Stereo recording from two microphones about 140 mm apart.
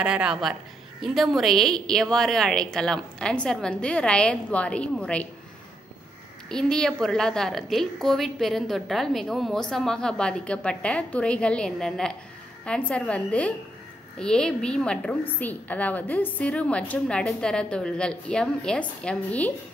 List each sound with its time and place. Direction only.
0.0 s a woman's voice: 5° right (ahead or behind)
6.5 s a woman's voice: 5° left (ahead or behind)